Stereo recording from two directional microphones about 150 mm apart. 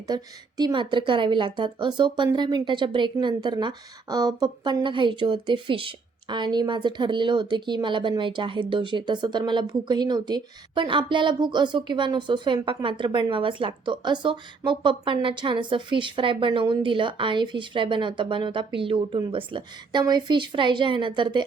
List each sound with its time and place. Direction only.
0.1 s a woman's voice: 30° right (ahead or behind)